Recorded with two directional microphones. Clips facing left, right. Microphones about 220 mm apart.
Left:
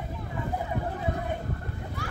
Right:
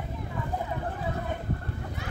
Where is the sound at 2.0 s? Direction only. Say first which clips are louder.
Left 2 dB; 20° right (ahead or behind).